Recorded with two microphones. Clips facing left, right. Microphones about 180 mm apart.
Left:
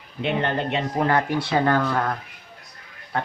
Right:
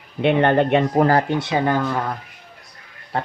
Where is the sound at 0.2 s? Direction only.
60° right (ahead or behind).